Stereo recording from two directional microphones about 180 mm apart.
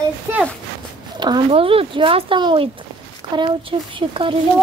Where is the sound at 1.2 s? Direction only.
30° right (ahead or behind).